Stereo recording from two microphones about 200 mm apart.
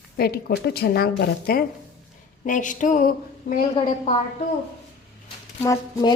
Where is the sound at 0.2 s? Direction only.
55° left (ahead or behind).